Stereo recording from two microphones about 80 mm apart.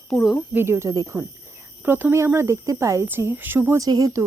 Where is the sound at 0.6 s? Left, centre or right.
Right.